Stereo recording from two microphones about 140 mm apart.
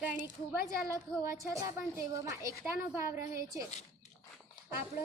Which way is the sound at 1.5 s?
20° right (ahead or behind).